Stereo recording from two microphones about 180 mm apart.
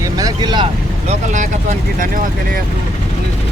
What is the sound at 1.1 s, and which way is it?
Speech, 45° right (ahead or behind).